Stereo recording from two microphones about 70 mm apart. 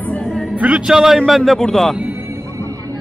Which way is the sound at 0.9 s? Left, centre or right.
Centre.